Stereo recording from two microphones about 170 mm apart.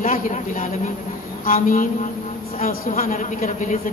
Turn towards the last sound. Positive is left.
turn(degrees=50)  # may be behind; listen again after turning